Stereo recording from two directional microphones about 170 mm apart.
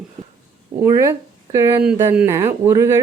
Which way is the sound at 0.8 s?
15° right (ahead or behind).